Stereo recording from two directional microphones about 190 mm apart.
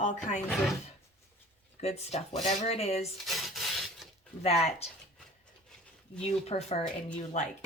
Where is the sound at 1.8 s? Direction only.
35° left (ahead or behind).